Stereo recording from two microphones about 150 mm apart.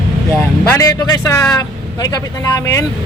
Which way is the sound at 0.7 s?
20° left (ahead or behind).